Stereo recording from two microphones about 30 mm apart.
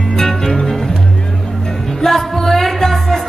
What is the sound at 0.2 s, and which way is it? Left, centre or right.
Music, centre.